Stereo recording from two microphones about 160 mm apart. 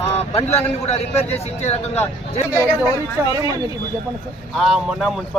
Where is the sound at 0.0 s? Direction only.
40° left (ahead or behind).